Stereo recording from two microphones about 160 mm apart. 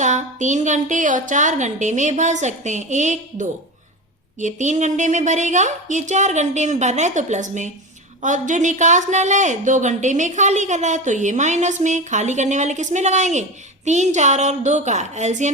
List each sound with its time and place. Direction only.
0.0 s speech: 50° right (ahead or behind)